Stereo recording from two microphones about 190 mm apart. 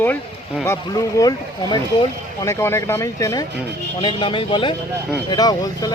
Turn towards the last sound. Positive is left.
turn(degrees=20)  # may be behind; listen again after turning